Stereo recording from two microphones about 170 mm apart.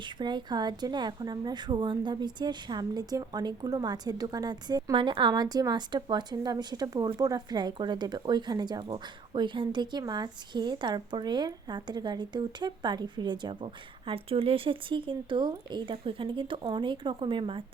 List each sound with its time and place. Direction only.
0.2 s a woman's voice: 25° right (ahead or behind)